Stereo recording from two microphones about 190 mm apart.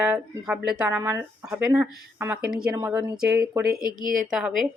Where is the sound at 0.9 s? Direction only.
15° right (ahead or behind).